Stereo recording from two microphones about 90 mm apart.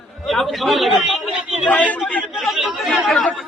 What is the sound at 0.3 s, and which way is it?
Speech, centre (ahead or behind).